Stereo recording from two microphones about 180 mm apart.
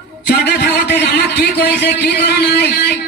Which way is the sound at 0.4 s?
70° left (ahead or behind).